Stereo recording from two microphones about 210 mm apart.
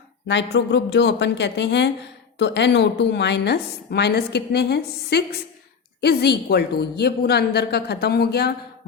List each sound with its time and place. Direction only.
0.3 s a woman's voice: 55° left (ahead or behind)